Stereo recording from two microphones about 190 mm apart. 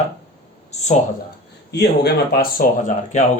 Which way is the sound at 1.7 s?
60° left (ahead or behind).